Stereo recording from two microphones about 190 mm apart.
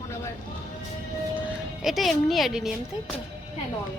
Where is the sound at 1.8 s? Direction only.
Centre (ahead or behind).